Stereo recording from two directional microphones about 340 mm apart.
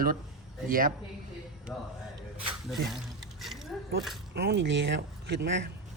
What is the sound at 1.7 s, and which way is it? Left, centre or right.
Speech, centre.